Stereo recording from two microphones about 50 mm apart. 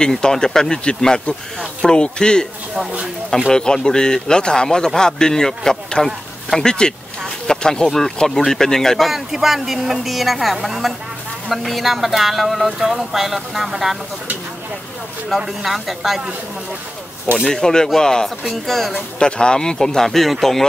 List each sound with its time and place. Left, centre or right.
0.0 s a man's voice: centre
3.5 s a man's voice: centre
7.4 s a sound: centre
7.8 s speech: centre
15.2 s speech: centre
17.5 s a man's voice: centre
19.1 s a man's voice: centre